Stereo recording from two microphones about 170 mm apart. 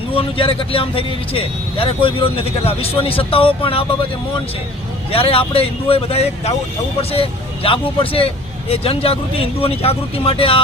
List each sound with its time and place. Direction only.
0.1 s speech: 30° left (ahead or behind)
5.1 s speech: 35° left (ahead or behind)